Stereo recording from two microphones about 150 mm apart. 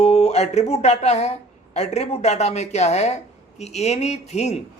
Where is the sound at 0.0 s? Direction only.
45° left (ahead or behind).